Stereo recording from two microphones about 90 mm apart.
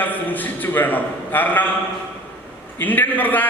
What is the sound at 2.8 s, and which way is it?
Speech, 20° left (ahead or behind).